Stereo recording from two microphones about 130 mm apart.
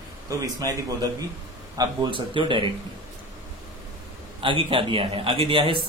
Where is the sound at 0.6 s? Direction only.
25° right (ahead or behind).